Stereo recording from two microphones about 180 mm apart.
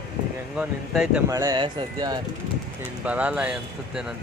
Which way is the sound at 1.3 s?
20° right (ahead or behind).